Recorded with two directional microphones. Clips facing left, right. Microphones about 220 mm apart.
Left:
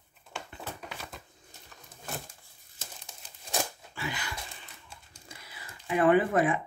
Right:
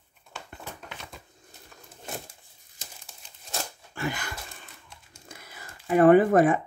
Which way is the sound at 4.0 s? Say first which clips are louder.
Right 5 dB; 50° right (ahead or behind).